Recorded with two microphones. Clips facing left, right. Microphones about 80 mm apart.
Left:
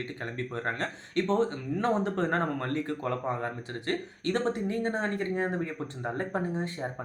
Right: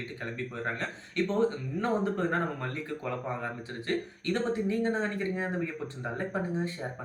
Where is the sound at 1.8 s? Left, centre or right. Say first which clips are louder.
Left 1 dB; left.